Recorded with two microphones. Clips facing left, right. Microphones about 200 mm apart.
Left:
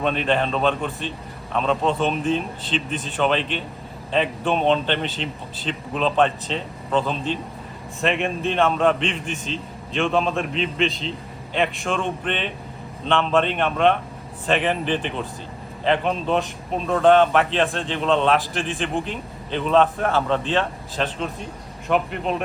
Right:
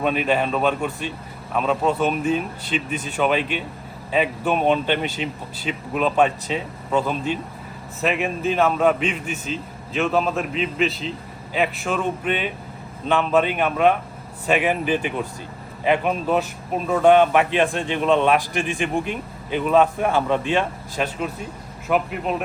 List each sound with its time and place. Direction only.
0.0 s a man's voice: 10° right (ahead or behind)